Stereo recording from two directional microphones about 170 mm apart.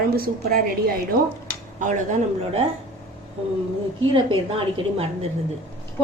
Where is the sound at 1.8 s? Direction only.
45° right (ahead or behind).